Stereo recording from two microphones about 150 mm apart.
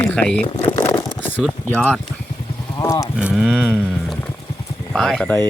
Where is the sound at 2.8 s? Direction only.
20° left (ahead or behind).